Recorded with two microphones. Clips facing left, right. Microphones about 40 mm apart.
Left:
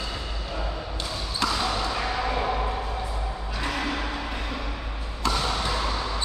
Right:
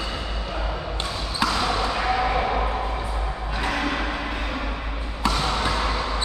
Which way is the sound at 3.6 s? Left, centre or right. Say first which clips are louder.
Right 3 dB; centre.